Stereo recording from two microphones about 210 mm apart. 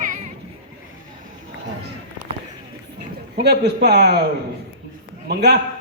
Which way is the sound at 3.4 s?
50° right (ahead or behind).